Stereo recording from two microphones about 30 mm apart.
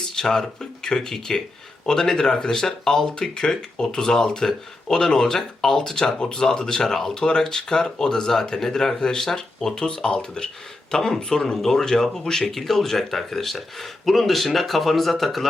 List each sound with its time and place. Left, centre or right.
0.2 s speech: left
12.5 s speech: centre